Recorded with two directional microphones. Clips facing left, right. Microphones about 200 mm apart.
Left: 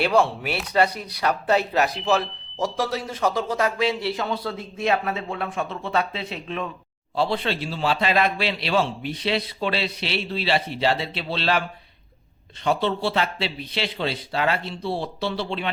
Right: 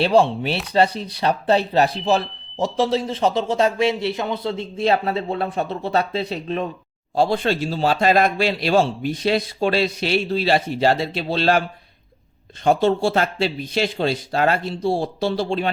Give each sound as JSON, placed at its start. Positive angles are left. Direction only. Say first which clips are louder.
{"t": 0.0, "sound": "a man's voice", "louder": "right 4 dB", "side_deg": -30}
{"t": 12.6, "sound": "a man's voice", "louder": "right 6 dB", "side_deg": -45}